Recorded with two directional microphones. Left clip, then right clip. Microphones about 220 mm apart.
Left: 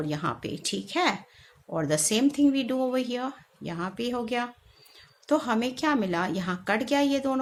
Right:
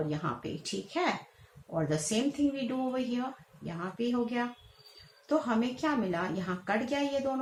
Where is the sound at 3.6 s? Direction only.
50° left (ahead or behind).